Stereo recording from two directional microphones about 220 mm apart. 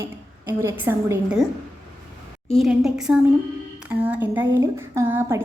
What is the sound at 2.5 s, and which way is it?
A woman's voice, centre (ahead or behind).